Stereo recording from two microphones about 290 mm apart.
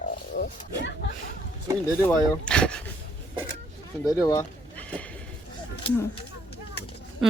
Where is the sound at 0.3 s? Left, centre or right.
Left.